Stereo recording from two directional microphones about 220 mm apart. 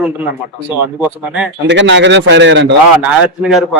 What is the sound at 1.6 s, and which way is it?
A man's voice, 55° right (ahead or behind).